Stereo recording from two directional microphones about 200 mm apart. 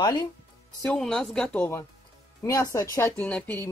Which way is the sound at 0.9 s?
5° left (ahead or behind).